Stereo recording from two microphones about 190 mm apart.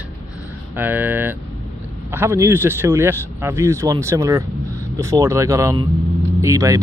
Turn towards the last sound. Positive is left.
turn(degrees=-15)  # may be behind; listen again after turning